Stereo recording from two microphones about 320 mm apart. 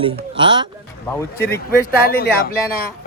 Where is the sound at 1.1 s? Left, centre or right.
Centre.